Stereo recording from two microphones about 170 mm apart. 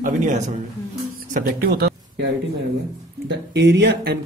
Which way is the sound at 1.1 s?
65° right (ahead or behind).